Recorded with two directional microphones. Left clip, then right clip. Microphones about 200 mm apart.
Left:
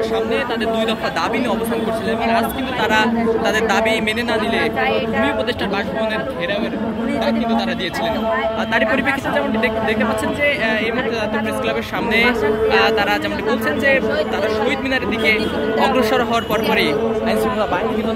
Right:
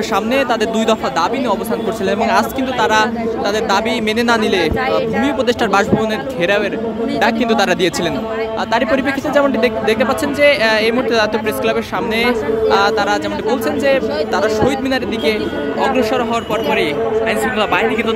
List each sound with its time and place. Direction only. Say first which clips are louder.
7.2 s speech: right 7 dB; 45° right (ahead or behind)
8.9 s a man's voice: right 3 dB; 30° right (ahead or behind)
15.8 s speech: right 1 dB; 10° right (ahead or behind)